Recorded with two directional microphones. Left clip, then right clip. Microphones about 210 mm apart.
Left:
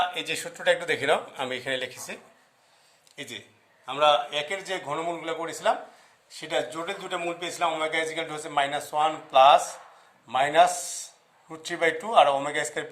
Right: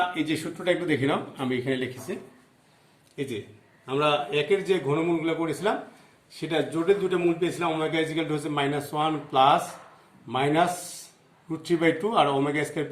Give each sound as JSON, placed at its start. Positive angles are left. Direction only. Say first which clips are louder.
{"t": 0.1, "sound": "speech", "louder": "right 2 dB", "side_deg": 55}
{"t": 3.2, "sound": "a man's voice", "louder": "right 6 dB", "side_deg": 40}